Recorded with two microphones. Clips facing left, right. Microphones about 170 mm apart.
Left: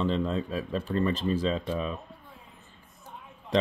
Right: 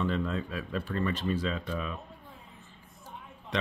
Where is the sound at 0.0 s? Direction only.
30° left (ahead or behind).